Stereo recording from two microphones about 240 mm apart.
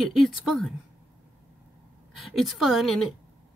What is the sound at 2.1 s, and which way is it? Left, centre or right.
Speech, centre.